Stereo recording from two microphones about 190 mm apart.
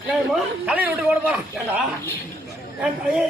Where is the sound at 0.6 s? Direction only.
5° right (ahead or behind).